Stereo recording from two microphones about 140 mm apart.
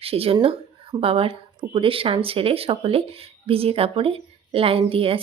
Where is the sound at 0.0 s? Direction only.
45° right (ahead or behind).